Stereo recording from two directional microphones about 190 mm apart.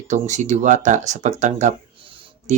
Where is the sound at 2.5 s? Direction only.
40° right (ahead or behind).